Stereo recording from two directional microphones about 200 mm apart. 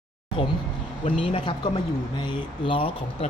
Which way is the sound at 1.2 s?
25° left (ahead or behind).